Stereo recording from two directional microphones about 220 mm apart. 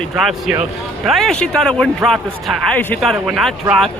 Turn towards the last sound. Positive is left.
turn(degrees=0)  # may be behind; listen again after turning